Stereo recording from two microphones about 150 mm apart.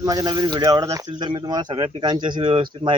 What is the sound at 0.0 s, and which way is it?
Speech, 25° right (ahead or behind).